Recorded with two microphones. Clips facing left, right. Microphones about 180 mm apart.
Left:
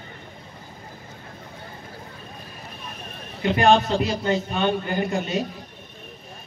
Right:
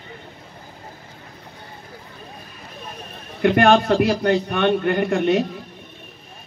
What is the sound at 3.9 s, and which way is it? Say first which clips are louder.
A man's voice: right 5 dB; 65° right (ahead or behind).